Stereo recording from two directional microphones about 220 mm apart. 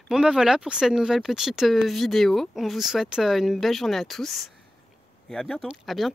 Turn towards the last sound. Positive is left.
turn(degrees=0)  # may be behind; listen again after turning